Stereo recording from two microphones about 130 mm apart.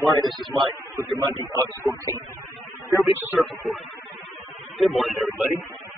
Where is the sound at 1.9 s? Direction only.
25° right (ahead or behind).